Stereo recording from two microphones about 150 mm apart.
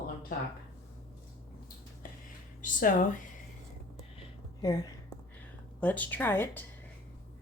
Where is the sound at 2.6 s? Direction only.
60° left (ahead or behind).